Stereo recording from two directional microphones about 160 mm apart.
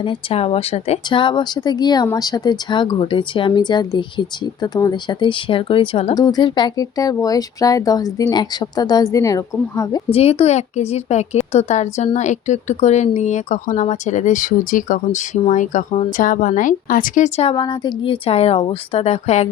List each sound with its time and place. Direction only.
0.0 s a woman's voice: 35° left (ahead or behind)
6.1 s a woman's voice: 25° left (ahead or behind)
10.1 s speech: 40° left (ahead or behind)
17.5 s speech: 30° left (ahead or behind)